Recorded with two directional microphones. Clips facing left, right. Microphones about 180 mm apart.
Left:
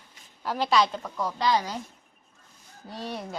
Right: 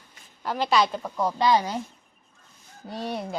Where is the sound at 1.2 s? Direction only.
20° right (ahead or behind).